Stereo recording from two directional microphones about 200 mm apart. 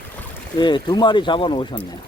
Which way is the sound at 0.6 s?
25° left (ahead or behind).